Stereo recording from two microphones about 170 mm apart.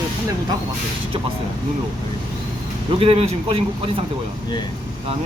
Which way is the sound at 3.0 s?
35° right (ahead or behind).